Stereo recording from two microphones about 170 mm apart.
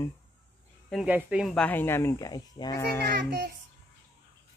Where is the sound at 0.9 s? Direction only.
5° right (ahead or behind).